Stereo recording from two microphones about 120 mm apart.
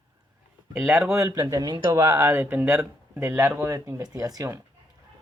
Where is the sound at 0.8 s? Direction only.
20° right (ahead or behind).